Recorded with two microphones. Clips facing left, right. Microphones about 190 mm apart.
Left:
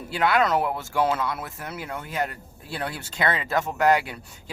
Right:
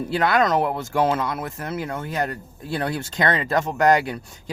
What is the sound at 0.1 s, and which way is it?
Speech, 40° right (ahead or behind).